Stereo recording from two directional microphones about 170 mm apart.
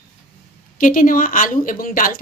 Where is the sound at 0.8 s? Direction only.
55° left (ahead or behind).